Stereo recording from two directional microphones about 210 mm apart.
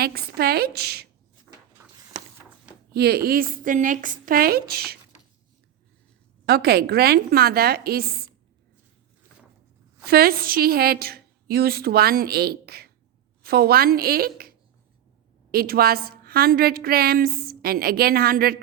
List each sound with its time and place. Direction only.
0.0 s a woman's voice: 45° right (ahead or behind)
1.7 s a sound: 15° right (ahead or behind)
2.9 s a woman's voice: 50° right (ahead or behind)
6.4 s a woman's voice: 50° right (ahead or behind)
10.1 s a woman's voice: 45° right (ahead or behind)
15.5 s a woman's voice: 45° right (ahead or behind)